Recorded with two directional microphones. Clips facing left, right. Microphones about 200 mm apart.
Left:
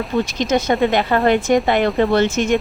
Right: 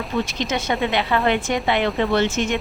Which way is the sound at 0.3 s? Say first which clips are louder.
Left 6 dB; 40° left (ahead or behind).